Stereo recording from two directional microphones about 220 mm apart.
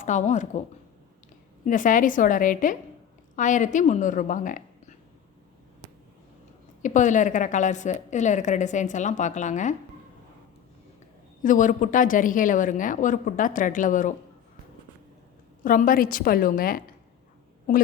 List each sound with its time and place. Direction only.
0.0 s a woman's voice: 35° left (ahead or behind)
1.6 s a woman's voice: 35° left (ahead or behind)
6.8 s a woman's voice: 35° left (ahead or behind)
11.4 s a woman's voice: 35° left (ahead or behind)
15.6 s a woman's voice: 40° left (ahead or behind)